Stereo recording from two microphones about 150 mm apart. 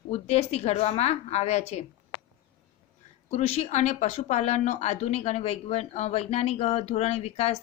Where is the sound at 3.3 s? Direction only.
50° left (ahead or behind).